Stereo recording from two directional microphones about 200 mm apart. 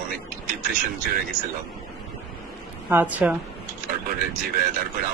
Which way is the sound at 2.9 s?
10° right (ahead or behind).